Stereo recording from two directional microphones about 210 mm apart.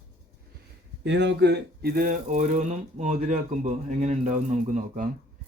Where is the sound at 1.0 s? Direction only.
55° right (ahead or behind).